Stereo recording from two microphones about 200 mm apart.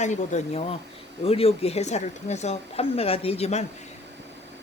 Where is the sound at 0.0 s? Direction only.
35° left (ahead or behind).